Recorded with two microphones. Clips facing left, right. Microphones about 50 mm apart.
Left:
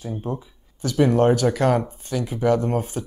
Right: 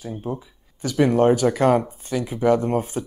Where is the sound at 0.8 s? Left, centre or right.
Centre.